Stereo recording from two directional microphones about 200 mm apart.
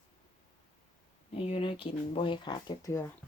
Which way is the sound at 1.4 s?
25° left (ahead or behind).